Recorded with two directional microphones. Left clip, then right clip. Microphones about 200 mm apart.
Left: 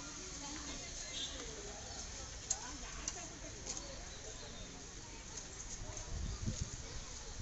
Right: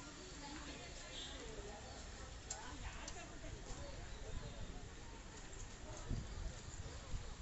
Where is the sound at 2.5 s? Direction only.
30° left (ahead or behind).